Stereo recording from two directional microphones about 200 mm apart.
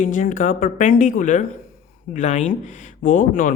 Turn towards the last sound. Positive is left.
turn(degrees=40)  # may be behind; listen again after turning